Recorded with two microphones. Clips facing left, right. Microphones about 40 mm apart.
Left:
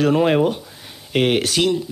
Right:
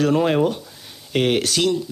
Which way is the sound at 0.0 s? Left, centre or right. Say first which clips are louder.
Left 2 dB; centre.